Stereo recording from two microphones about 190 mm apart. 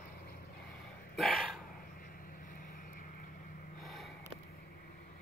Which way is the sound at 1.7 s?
50° left (ahead or behind).